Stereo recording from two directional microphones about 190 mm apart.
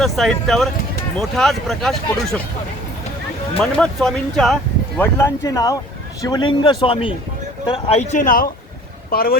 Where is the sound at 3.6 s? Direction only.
5° left (ahead or behind).